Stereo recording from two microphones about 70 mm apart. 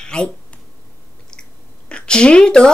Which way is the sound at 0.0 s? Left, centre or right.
Centre.